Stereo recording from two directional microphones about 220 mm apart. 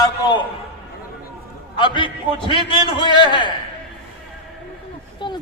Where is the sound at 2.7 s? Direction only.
20° right (ahead or behind).